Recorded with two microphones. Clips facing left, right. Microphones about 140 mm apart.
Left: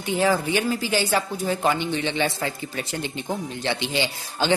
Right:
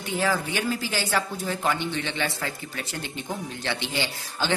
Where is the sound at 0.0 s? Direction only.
20° left (ahead or behind).